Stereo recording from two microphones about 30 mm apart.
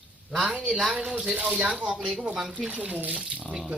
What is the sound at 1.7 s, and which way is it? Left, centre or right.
Speech, right.